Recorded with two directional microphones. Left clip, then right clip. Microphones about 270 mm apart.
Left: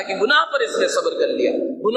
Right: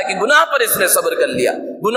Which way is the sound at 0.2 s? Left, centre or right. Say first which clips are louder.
Right 4 dB; right.